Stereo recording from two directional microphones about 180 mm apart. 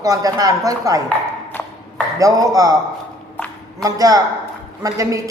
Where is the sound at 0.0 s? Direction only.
20° right (ahead or behind).